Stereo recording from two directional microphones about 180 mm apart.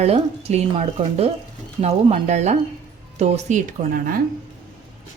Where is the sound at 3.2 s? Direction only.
40° right (ahead or behind).